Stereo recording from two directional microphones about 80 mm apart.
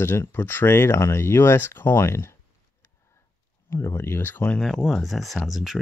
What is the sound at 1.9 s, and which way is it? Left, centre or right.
Speech, left.